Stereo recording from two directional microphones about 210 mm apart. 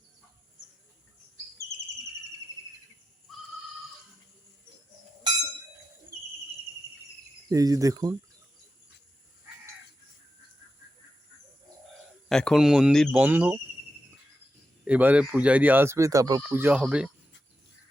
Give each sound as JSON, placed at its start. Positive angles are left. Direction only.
{"t": 7.5, "sound": "speech", "side_deg": -15}
{"t": 12.3, "sound": "speech", "side_deg": 5}
{"t": 14.8, "sound": "speech", "side_deg": -5}